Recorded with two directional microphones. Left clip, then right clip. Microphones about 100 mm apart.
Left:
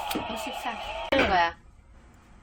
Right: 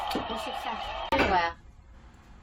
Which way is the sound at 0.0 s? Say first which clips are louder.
Even; 25° right (ahead or behind).